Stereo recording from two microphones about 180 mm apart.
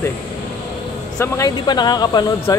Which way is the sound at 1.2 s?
20° left (ahead or behind).